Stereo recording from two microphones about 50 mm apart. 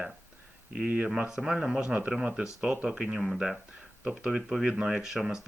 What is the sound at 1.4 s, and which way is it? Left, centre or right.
Speech, centre.